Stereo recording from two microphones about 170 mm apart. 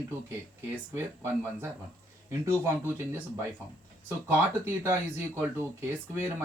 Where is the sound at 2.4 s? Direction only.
15° right (ahead or behind).